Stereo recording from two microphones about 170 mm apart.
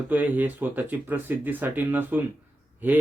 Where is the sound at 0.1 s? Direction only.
10° right (ahead or behind).